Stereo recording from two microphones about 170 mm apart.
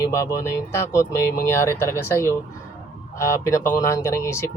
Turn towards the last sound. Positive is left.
turn(degrees=15)  # may be behind; listen again after turning